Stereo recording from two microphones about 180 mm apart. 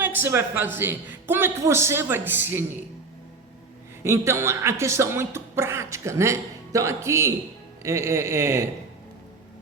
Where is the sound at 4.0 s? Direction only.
15° right (ahead or behind).